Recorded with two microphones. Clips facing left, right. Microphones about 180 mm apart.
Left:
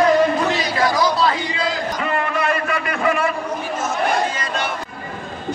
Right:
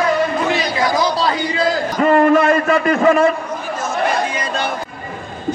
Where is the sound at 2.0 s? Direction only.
45° right (ahead or behind).